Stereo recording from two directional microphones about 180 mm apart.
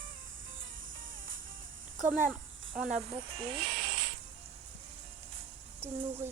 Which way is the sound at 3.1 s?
30° right (ahead or behind).